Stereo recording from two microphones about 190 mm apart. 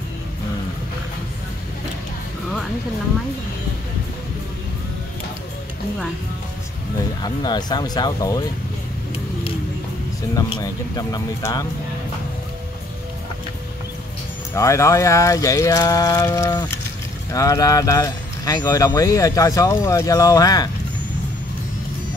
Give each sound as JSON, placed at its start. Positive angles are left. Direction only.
{"t": 7.2, "sound": "speech", "side_deg": 20}
{"t": 10.3, "sound": "speech", "side_deg": 20}
{"t": 14.5, "sound": "speech", "side_deg": 15}